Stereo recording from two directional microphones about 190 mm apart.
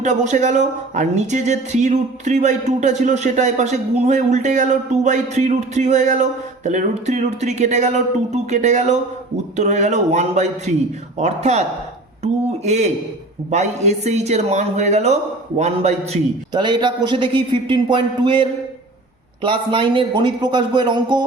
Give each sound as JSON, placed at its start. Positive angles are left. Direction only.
{"t": 0.0, "sound": "speech", "side_deg": -40}
{"t": 16.5, "sound": "a man's voice", "side_deg": -25}